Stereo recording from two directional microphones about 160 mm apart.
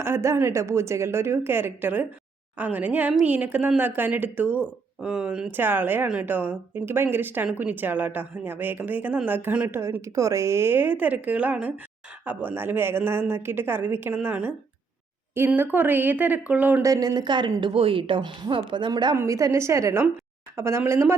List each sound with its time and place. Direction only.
0.0 s a woman's voice: 15° right (ahead or behind)
16.8 s a woman's voice: 20° right (ahead or behind)